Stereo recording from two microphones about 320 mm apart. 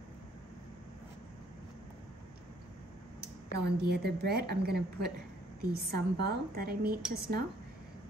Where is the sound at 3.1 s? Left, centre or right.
Right.